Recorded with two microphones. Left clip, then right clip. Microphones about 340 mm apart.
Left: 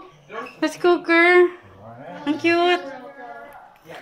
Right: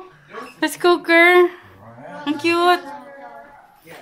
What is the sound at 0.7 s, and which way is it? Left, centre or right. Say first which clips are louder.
Speech: right 3 dB; right.